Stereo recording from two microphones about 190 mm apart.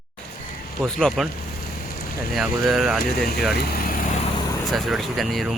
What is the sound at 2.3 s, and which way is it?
Speech, centre (ahead or behind).